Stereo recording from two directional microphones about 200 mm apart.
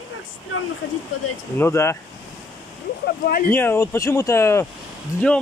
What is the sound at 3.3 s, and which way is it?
Speech, 45° left (ahead or behind).